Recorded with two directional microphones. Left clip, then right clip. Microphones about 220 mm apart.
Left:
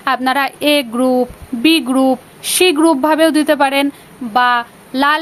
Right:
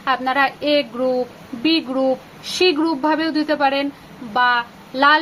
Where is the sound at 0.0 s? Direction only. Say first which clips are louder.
Left 3 dB; 50° left (ahead or behind).